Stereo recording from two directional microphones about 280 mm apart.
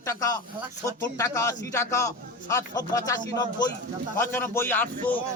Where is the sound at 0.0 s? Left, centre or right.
Centre.